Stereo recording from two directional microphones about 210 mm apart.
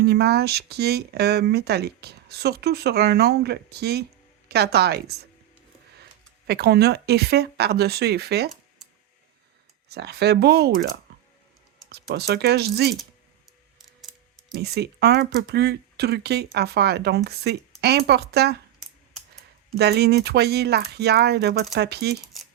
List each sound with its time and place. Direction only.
0.0 s speech: 50° right (ahead or behind)
6.5 s speech: 50° right (ahead or behind)
9.9 s speech: 50° right (ahead or behind)
13.7 s a sound: centre (ahead or behind)
14.6 s speech: 50° right (ahead or behind)
19.7 s speech: 50° right (ahead or behind)